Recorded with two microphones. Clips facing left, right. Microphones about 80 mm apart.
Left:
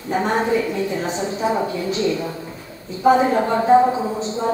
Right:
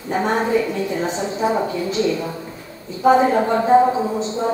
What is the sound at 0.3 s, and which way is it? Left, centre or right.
Speech, centre.